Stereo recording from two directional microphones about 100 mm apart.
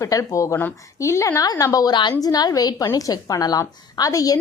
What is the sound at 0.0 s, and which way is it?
A woman's voice, 30° left (ahead or behind).